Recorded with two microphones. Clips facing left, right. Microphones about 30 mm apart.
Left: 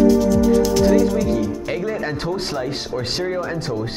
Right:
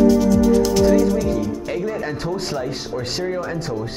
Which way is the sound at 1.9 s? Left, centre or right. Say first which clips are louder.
Left 1 dB; centre.